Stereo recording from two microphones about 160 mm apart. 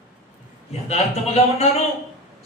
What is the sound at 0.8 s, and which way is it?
Speech, 40° left (ahead or behind).